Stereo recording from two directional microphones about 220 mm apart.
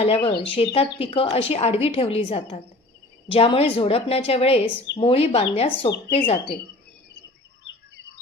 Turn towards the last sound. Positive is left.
turn(degrees=30)  # may be behind; listen again after turning